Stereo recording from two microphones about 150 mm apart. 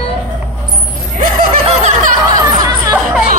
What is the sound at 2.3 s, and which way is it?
Music, 25° right (ahead or behind).